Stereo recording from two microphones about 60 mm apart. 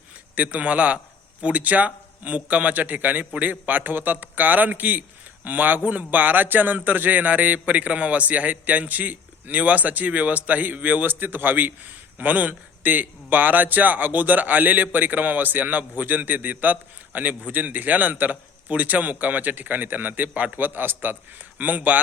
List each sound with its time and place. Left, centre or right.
0.3 s a man's voice: right